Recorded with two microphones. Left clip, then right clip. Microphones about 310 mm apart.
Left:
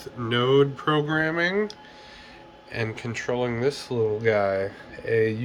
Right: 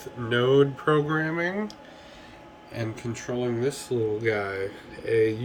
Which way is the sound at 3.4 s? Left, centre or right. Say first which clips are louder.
Left 1 dB; centre.